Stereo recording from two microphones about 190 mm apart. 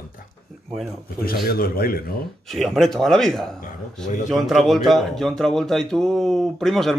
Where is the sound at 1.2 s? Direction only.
50° left (ahead or behind).